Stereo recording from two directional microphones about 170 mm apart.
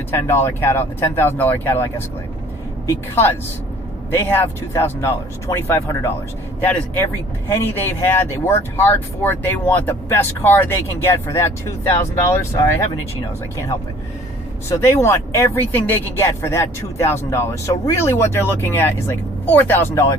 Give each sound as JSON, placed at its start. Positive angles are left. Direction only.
{"t": 0.1, "sound": "speech", "side_deg": 15}
{"t": 14.7, "sound": "speech", "side_deg": 15}